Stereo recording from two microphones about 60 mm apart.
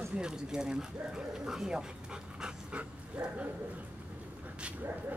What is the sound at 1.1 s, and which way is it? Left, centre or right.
Dog, centre.